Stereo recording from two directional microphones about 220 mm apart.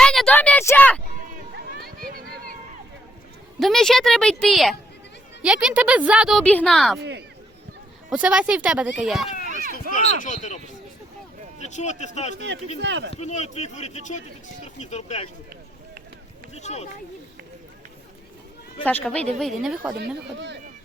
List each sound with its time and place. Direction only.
0.0 s a sound: centre (ahead or behind)
3.6 s a woman's voice: centre (ahead or behind)
7.0 s speech: 50° right (ahead or behind)
8.1 s a woman's voice: 5° right (ahead or behind)
10.2 s speech: 35° left (ahead or behind)
11.6 s speech: 30° left (ahead or behind)
12.8 s speech: 55° right (ahead or behind)
13.1 s speech: 30° left (ahead or behind)
16.6 s speech: 30° left (ahead or behind)
18.9 s a woman's voice: 5° left (ahead or behind)
19.9 s speech: 50° right (ahead or behind)